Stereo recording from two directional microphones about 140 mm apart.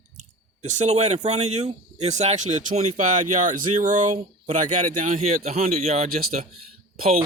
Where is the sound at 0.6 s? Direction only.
55° right (ahead or behind).